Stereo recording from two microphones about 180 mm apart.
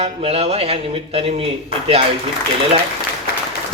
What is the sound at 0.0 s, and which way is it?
A man's voice, 35° right (ahead or behind).